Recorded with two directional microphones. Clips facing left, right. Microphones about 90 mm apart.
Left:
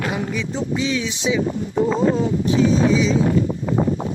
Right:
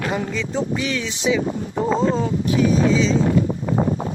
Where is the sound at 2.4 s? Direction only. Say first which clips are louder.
Left 1 dB; 25° left (ahead or behind).